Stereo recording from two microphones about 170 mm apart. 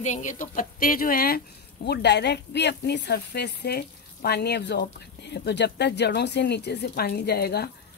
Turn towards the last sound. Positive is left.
turn(degrees=70)  # may be behind; listen again after turning